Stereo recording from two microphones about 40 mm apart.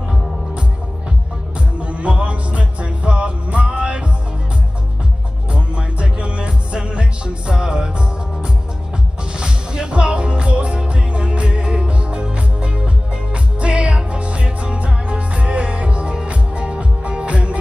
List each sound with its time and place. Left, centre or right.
1.8 s music: right
5.5 s music: right